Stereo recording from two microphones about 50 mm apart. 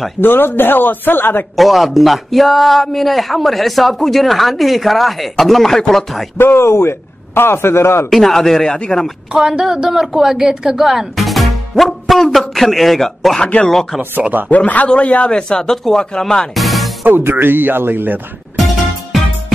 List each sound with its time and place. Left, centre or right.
0.2 s speech: left
1.6 s a man's voice: centre
6.3 s a man's voice: left
8.1 s speech: centre
9.3 s a woman's voice: centre
13.4 s a man's voice: left
16.5 s music: centre
17.0 s speech: right